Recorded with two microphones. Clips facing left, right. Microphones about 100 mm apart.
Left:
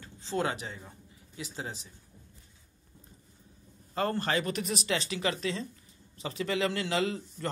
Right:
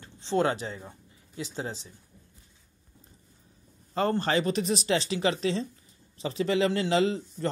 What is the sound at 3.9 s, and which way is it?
Speech, 30° right (ahead or behind).